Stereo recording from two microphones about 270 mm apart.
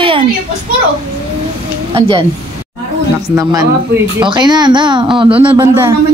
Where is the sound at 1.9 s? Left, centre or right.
Right.